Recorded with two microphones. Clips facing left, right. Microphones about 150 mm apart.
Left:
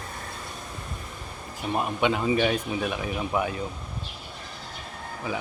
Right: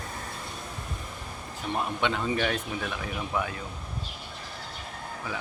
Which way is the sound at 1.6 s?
15° left (ahead or behind).